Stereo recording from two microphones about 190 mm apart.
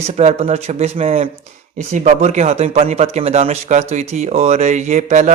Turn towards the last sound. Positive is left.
turn(degrees=-40)  # may be behind; listen again after turning